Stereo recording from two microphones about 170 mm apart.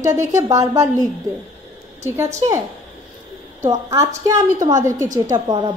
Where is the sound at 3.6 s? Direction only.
20° right (ahead or behind).